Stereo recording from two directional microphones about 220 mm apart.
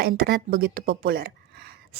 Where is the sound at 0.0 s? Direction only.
45° right (ahead or behind).